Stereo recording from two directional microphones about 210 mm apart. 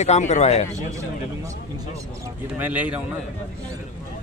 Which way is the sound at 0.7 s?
15° right (ahead or behind).